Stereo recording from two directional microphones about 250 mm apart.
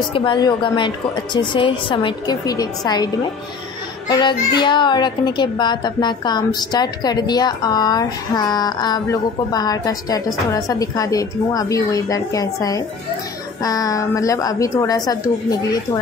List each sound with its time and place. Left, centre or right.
0.1 s a woman's voice: centre
4.1 s a child's voice: centre